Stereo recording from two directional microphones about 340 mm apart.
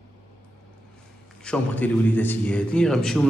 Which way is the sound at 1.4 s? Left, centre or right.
Centre.